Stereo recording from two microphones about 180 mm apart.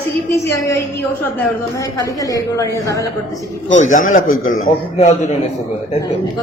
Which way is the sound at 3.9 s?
45° left (ahead or behind).